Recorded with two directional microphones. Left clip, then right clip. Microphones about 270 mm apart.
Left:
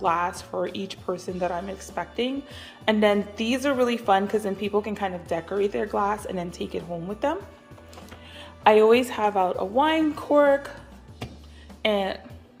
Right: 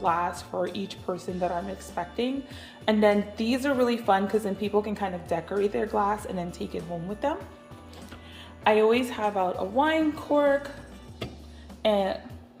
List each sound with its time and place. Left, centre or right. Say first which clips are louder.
0.0 s a woman's voice: left 2 dB; centre
8.6 s a woman's voice: left 5 dB; centre
11.8 s speech: even; centre